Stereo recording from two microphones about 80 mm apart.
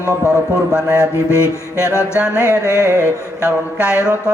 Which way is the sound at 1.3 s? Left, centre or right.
Left.